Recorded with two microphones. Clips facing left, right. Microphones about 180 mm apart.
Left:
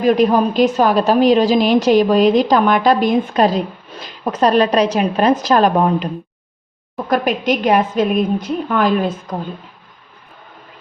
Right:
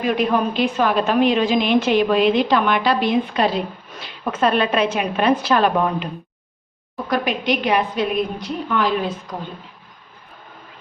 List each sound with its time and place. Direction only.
0.0 s a woman's voice: 40° left (ahead or behind)
7.1 s a woman's voice: 45° left (ahead or behind)